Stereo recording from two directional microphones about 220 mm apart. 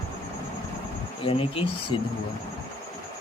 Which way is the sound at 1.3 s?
25° left (ahead or behind).